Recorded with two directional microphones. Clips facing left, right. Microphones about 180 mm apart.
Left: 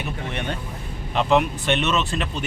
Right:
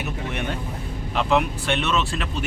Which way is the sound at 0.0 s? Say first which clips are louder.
Right 1 dB; 5° right (ahead or behind).